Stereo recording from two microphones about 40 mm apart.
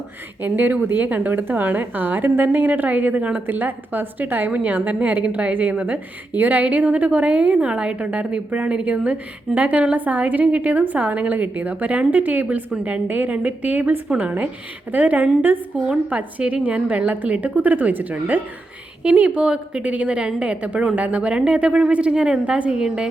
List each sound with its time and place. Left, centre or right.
0.4 s a woman's voice: right
1.0 s a woman's voice: right
1.3 s a woman's voice: right
6.3 s a woman's voice: right
16.0 s a woman's voice: right